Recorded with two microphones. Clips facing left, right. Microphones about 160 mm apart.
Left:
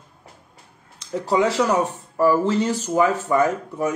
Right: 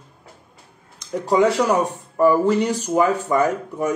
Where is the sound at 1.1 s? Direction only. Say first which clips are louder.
Right 2 dB; 10° right (ahead or behind).